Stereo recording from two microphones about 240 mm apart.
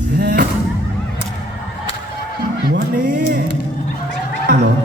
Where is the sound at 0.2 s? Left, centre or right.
Right.